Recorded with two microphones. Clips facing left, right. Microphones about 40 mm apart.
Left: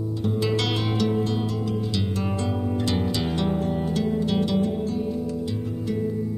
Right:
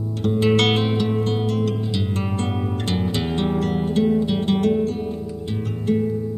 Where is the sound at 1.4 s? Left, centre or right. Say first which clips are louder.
Right 6 dB; right.